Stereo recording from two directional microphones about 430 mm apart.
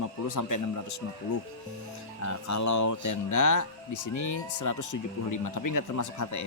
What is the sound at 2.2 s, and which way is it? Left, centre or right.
Speech, left.